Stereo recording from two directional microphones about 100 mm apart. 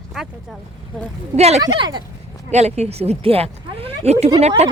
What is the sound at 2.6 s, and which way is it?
Speech, 90° right.